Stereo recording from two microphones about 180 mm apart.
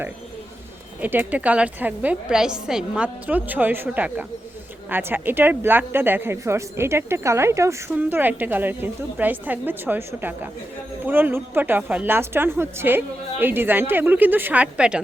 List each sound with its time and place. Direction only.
1.0 s a woman's voice: 10° right (ahead or behind)